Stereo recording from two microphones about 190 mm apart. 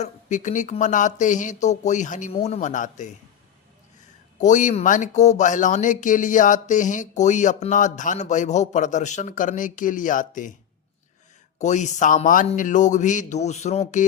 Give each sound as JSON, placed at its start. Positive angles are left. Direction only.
{"t": 0.0, "sound": "speech", "side_deg": 40}
{"t": 4.4, "sound": "speech", "side_deg": 40}
{"t": 11.6, "sound": "speech", "side_deg": 40}